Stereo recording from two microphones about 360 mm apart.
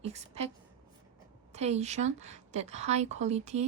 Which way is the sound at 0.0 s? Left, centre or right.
Centre.